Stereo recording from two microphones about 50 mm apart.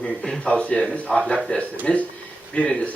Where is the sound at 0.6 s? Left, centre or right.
Left.